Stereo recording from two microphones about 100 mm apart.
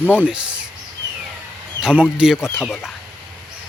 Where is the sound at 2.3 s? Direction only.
25° left (ahead or behind).